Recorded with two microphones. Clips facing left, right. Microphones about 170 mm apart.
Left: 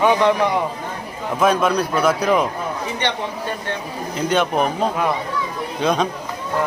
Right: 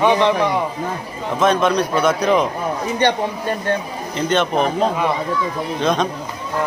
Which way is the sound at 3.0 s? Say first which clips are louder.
Right 7 dB; 40° right (ahead or behind).